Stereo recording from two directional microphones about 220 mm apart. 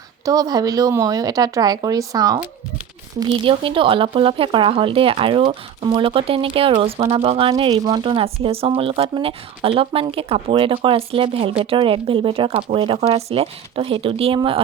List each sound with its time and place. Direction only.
0.3 s speech: 15° right (ahead or behind)